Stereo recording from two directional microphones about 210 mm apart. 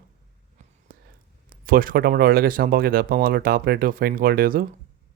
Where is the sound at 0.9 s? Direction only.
45° right (ahead or behind).